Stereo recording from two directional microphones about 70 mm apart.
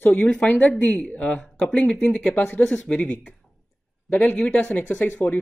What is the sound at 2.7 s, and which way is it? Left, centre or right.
Speech, centre.